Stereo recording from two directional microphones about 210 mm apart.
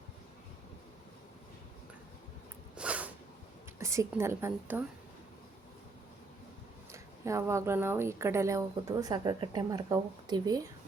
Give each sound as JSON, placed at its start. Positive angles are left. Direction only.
{"t": 2.7, "sound": "a sound", "side_deg": -5}
{"t": 4.1, "sound": "speech", "side_deg": -10}
{"t": 6.9, "sound": "speech", "side_deg": -15}